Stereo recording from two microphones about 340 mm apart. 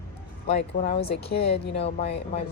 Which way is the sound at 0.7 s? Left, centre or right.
Left.